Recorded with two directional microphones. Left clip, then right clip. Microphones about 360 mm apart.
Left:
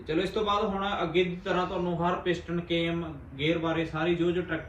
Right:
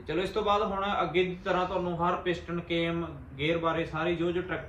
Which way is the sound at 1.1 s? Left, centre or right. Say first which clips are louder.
Left 1 dB; centre.